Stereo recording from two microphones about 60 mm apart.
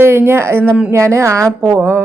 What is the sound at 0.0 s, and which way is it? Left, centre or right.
Speech, right.